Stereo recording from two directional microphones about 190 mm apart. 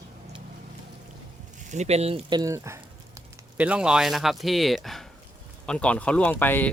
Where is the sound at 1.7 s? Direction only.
35° right (ahead or behind).